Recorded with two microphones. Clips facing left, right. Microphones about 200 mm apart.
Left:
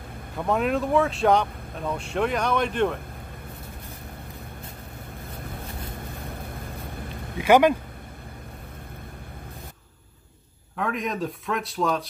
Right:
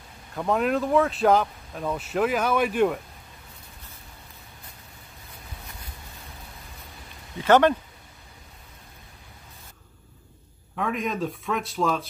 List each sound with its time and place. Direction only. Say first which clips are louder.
0.4 s speech: even; centre (ahead or behind)
5.3 s vehicle: left 7 dB; 55° left (ahead or behind)
7.3 s speech: left 1 dB; 10° left (ahead or behind)
10.8 s speech: even; centre (ahead or behind)